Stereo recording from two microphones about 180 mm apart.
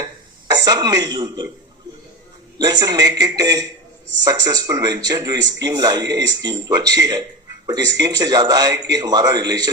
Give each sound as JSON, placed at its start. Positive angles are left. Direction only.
{"t": 0.5, "sound": "a man's voice", "side_deg": -20}
{"t": 2.6, "sound": "a man's voice", "side_deg": -20}